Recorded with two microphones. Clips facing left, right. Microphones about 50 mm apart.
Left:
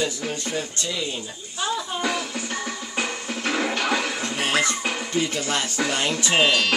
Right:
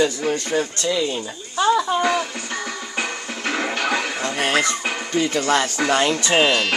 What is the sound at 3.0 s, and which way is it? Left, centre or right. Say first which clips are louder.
Music: right 1 dB; centre.